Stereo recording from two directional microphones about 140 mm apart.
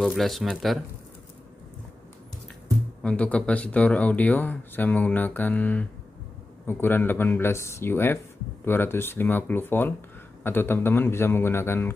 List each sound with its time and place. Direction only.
0.0 s speech: centre (ahead or behind)
3.0 s speech: 10° left (ahead or behind)